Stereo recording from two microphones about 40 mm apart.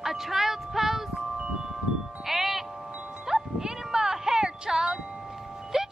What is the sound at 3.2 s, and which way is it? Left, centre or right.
Music, centre.